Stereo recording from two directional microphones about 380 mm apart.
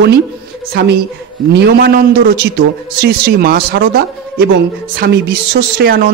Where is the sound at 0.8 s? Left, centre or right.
Right.